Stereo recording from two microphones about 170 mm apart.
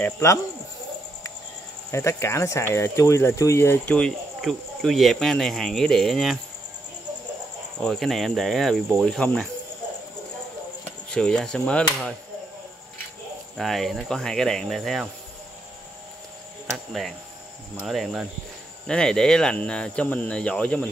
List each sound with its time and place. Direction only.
0.0 s speech: 15° left (ahead or behind)
1.9 s speech: 15° left (ahead or behind); by 6.4 s centre (ahead or behind)
7.8 s speech: centre (ahead or behind)
11.1 s speech: 5° left (ahead or behind)
13.6 s speech: centre (ahead or behind)
16.7 s speech: centre (ahead or behind)